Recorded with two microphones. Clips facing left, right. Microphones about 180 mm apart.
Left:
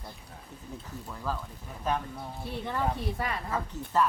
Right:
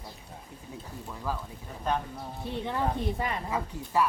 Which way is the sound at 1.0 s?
10° right (ahead or behind).